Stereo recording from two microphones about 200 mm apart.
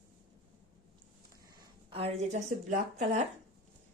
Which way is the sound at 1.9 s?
30° right (ahead or behind).